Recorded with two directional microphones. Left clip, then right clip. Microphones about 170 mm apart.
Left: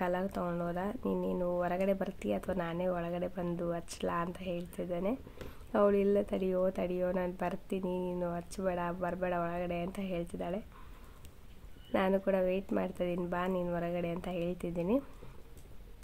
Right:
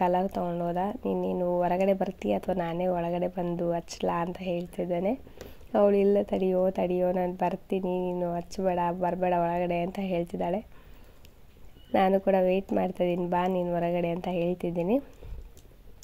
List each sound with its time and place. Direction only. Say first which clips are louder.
0.0 s speech: right 8 dB; 15° right (ahead or behind)
1.0 s speech: right 6 dB; 25° left (ahead or behind)
1.6 s speech: right 9 dB; 20° right (ahead or behind)
7.8 s speech: right 5 dB; 25° left (ahead or behind)
8.1 s speech: right 6 dB; 15° right (ahead or behind)
11.9 s speech: right 7 dB; 20° right (ahead or behind)